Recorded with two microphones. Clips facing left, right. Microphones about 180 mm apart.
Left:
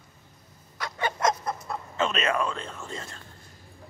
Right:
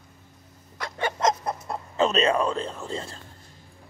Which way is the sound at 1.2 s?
20° right (ahead or behind).